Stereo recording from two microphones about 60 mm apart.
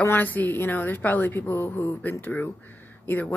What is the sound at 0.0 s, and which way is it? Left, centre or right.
Speech, left.